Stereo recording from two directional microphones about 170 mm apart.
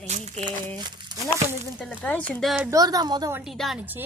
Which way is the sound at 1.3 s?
10° right (ahead or behind).